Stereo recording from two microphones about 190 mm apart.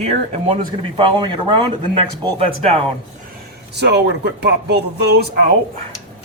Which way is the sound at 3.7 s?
65° right (ahead or behind).